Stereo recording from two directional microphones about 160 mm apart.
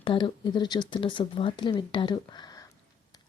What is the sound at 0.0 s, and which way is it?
Speech, 30° left (ahead or behind).